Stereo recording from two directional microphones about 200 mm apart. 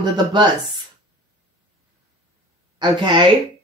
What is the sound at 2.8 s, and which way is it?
Speech, 20° right (ahead or behind).